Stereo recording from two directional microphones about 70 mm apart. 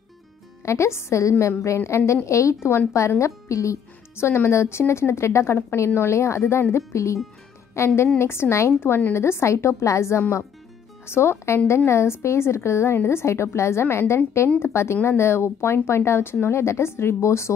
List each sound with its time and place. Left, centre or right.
0.7 s a woman's voice: left